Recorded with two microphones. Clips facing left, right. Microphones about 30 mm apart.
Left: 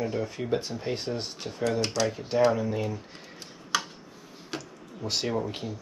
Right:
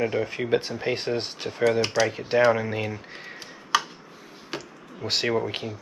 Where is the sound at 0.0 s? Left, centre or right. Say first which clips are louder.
Right 5 dB; right.